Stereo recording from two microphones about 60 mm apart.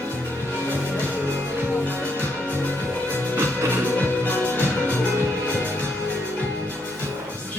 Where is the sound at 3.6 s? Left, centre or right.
Right.